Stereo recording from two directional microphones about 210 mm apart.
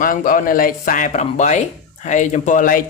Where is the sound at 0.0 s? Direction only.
40° left (ahead or behind).